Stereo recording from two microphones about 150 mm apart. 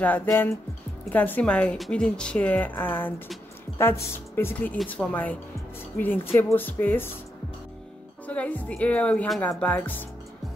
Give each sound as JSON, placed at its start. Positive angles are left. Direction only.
{"t": 0.0, "sound": "a woman's voice", "side_deg": 10}
{"t": 8.3, "sound": "a woman's voice", "side_deg": 10}